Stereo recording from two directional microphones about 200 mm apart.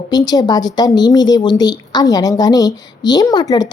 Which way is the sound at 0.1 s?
20° left (ahead or behind).